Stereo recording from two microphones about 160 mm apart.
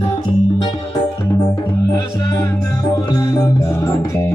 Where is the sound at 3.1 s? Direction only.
20° left (ahead or behind).